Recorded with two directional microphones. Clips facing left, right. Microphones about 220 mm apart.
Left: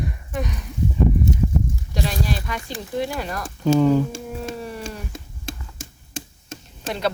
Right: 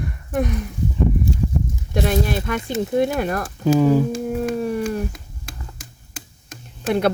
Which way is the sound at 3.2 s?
55° right (ahead or behind).